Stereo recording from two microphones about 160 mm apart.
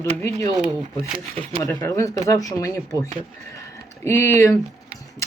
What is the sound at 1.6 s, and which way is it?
Speech, 20° left (ahead or behind).